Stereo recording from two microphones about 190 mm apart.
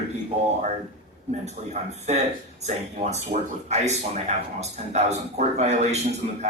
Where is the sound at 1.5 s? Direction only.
35° right (ahead or behind).